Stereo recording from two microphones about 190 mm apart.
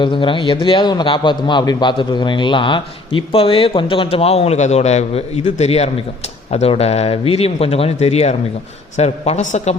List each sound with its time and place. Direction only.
0.0 s a man's voice: 25° left (ahead or behind)